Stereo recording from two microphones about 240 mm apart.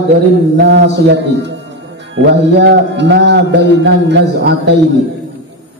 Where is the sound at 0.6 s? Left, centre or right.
Right.